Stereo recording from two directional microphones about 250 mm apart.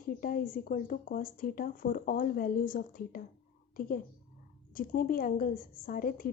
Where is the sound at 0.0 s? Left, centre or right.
Left.